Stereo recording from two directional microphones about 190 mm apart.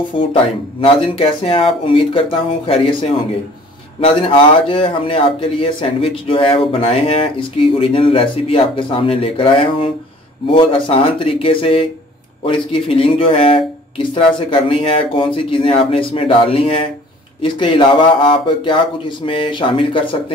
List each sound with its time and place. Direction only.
0.1 s a man's voice: 30° left (ahead or behind)